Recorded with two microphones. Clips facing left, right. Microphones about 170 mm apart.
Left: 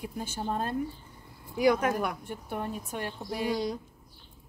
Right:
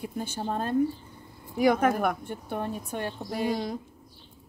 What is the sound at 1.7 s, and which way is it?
Speech, 50° right (ahead or behind).